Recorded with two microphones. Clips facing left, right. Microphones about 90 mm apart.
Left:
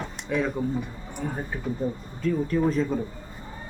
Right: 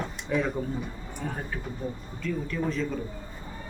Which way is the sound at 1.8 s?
35° left (ahead or behind).